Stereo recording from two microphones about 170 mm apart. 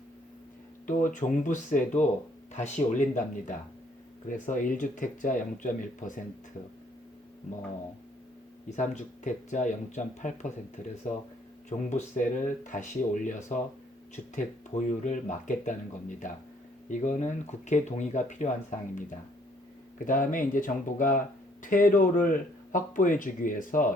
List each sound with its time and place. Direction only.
0.9 s speech: 50° left (ahead or behind)
8.7 s speech: 45° left (ahead or behind)
20.1 s speech: 50° left (ahead or behind)